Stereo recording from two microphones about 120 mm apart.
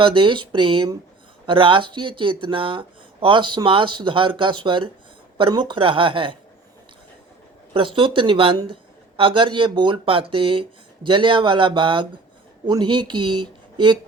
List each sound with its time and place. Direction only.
0.0 s speech: 40° right (ahead or behind)
7.7 s speech: 45° right (ahead or behind)